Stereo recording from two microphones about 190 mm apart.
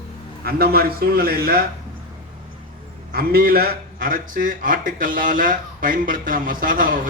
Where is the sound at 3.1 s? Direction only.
50° right (ahead or behind).